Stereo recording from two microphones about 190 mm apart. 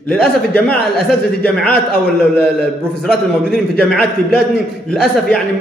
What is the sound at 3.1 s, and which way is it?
A man's voice, centre (ahead or behind).